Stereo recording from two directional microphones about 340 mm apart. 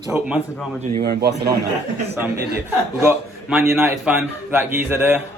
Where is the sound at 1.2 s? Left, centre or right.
Right.